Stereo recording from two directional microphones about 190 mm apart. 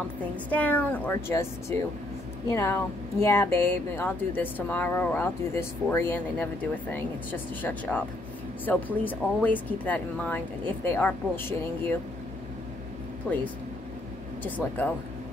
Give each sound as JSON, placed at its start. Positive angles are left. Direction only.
{"t": 0.5, "sound": "speech", "side_deg": 10}
{"t": 13.3, "sound": "speech", "side_deg": 5}